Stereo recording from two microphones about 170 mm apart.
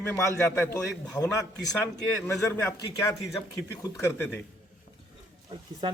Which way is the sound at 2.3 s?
15° left (ahead or behind).